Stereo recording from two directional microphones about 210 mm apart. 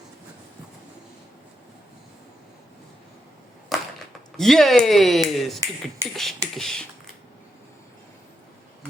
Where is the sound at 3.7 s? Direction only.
Centre (ahead or behind).